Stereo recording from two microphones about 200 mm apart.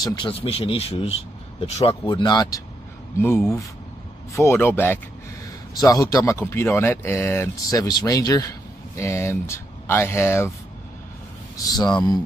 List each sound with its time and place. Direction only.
0.0 s speech: 20° left (ahead or behind)
11.5 s speech: 20° left (ahead or behind)